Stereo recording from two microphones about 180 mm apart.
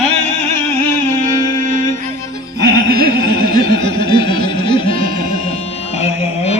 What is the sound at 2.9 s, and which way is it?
Music, 60° right (ahead or behind).